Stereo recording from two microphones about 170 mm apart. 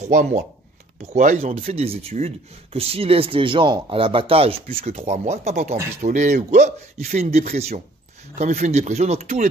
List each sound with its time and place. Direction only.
0.0 s a man's voice: 45° right (ahead or behind)